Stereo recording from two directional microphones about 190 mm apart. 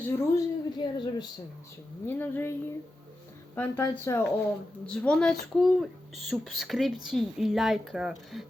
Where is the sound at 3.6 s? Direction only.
10° left (ahead or behind).